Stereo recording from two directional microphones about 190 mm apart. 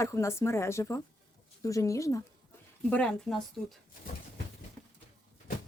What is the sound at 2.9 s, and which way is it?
Speech, 5° left (ahead or behind).